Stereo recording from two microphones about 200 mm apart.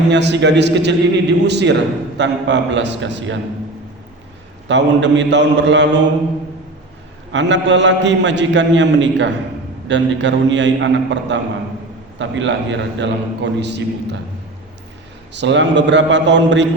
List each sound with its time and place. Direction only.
0.1 s a man's voice: 60° right (ahead or behind)
4.7 s a man's voice: 65° right (ahead or behind)
7.3 s a man's voice: 65° right (ahead or behind)
15.3 s a man's voice: 65° right (ahead or behind)